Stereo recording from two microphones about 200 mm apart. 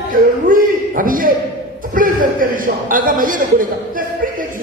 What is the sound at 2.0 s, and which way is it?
A man's voice, 45° right (ahead or behind).